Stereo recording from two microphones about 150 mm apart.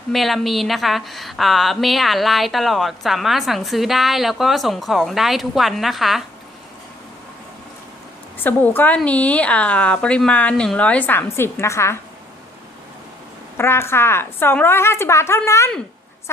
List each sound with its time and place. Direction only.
0.1 s a woman's voice: centre (ahead or behind)
8.4 s a woman's voice: 10° left (ahead or behind)
13.6 s a woman's voice: 15° left (ahead or behind)